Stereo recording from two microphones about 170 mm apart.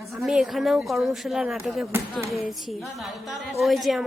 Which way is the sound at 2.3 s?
Centre (ahead or behind).